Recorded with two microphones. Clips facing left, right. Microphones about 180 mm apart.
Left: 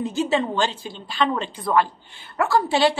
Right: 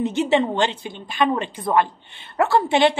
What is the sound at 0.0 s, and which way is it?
A woman's voice, 20° right (ahead or behind).